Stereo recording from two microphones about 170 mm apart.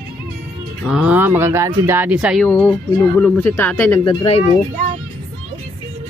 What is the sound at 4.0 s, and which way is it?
Speech, 30° left (ahead or behind).